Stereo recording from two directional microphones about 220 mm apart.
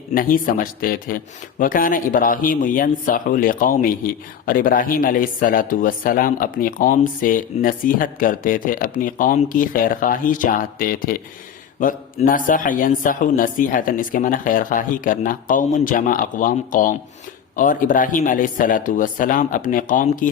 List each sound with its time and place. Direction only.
0.1 s speech: 40° left (ahead or behind)